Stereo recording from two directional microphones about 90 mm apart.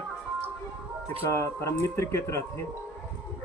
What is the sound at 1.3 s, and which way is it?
Speech, 35° left (ahead or behind).